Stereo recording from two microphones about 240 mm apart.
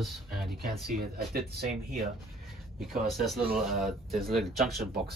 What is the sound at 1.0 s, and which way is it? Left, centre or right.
Speech, right.